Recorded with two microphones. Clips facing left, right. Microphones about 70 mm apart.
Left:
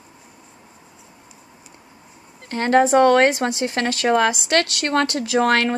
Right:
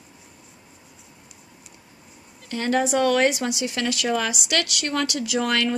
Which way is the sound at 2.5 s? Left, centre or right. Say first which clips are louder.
Left 7 dB; left.